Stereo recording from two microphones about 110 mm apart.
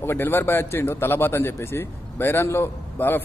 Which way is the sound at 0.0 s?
20° left (ahead or behind).